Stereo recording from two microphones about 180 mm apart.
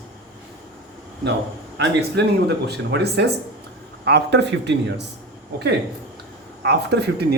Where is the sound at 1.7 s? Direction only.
80° right.